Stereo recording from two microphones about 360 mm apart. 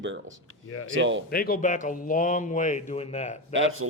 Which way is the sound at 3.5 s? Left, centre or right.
Right.